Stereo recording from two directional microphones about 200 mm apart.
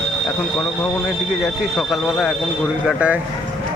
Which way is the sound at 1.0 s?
Centre (ahead or behind).